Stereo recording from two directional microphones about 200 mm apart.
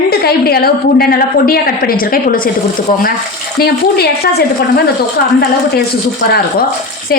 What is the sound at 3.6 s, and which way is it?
A woman's voice, 50° left (ahead or behind).